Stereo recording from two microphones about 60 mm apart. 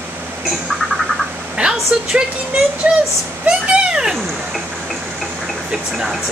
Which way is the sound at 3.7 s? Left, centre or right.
Centre.